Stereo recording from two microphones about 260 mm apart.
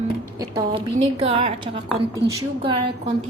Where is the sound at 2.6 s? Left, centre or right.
Centre.